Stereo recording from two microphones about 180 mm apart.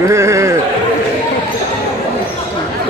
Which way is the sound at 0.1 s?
15° right (ahead or behind).